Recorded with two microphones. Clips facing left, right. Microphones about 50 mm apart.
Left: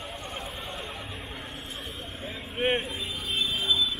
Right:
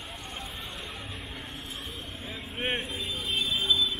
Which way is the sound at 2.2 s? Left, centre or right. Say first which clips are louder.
Left 5 dB; centre.